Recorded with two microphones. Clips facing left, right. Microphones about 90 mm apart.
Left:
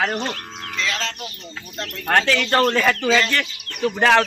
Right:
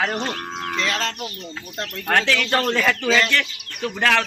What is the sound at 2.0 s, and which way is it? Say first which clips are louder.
Speech: left 2 dB; 5° left (ahead or behind).